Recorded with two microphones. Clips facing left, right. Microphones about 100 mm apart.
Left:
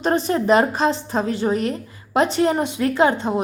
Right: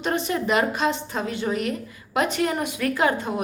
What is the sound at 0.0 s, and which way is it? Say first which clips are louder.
A woman's voice: left 5 dB; 35° left (ahead or behind).